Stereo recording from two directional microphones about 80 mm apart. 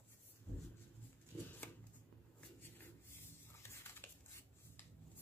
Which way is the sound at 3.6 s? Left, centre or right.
Left.